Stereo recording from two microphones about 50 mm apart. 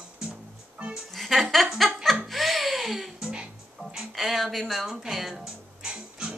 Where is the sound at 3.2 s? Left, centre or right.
Right.